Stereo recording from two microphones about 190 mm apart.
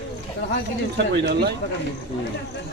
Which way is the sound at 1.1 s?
60° right (ahead or behind).